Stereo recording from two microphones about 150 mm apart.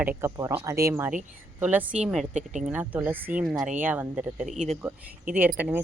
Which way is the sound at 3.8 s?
10° right (ahead or behind).